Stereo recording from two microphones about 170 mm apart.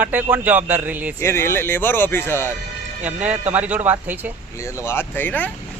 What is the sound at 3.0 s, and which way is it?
A man's voice, 10° right (ahead or behind).